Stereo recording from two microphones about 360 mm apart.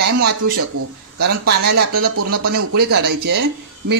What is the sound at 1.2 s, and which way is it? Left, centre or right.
Speech, right.